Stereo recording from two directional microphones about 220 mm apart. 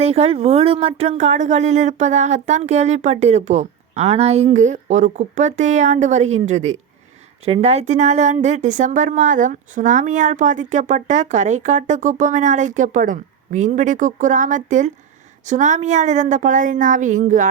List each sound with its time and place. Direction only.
0.0 s speech: 30° right (ahead or behind)